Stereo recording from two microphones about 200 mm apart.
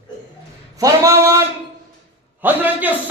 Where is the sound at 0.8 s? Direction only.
15° right (ahead or behind).